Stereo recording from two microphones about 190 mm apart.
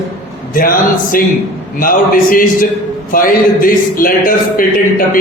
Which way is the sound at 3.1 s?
45° left (ahead or behind).